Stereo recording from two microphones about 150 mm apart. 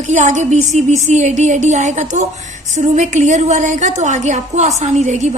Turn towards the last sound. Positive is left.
turn(degrees=-50)  # may be behind; listen again after turning